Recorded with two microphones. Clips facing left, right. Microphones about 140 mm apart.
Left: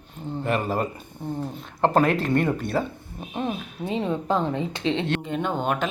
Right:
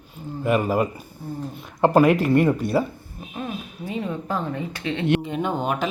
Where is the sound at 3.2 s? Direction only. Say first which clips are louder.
Left 3 dB; 25° left (ahead or behind).